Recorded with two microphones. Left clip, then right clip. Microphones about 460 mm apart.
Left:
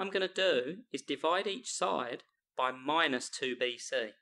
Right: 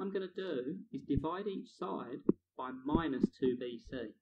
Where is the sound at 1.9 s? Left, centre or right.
Left.